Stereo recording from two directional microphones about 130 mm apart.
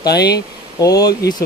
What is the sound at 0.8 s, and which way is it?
Speech, 30° left (ahead or behind).